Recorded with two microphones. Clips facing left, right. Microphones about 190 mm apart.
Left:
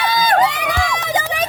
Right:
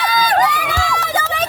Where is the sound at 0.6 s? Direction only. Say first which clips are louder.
Even; 20° left (ahead or behind).